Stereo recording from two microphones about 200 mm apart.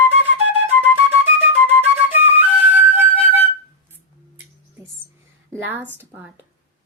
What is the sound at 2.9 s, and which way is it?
Music, 10° right (ahead or behind).